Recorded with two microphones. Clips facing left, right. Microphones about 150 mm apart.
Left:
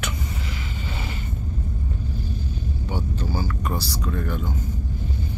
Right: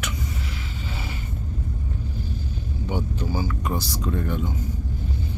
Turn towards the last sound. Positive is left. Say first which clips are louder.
# right 1 dB
turn(degrees=-20)  # may be behind; listen again after turning